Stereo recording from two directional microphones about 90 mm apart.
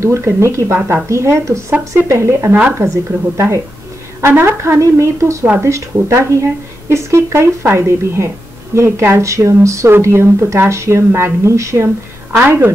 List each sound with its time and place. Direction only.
0.0 s a woman's voice: 35° right (ahead or behind)